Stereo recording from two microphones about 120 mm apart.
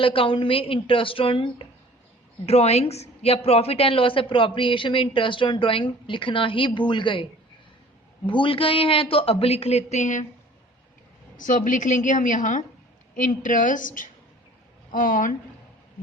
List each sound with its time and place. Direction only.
0.0 s a woman's voice: 50° left (ahead or behind)
2.5 s a woman's voice: 60° left (ahead or behind); by 7.3 s 45° left (ahead or behind)
8.3 s a woman's voice: 45° left (ahead or behind); by 10.2 s 85° left
11.3 s a woman's voice: 90° left